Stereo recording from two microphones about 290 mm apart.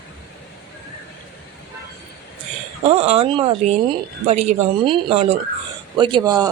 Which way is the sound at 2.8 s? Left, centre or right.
Right.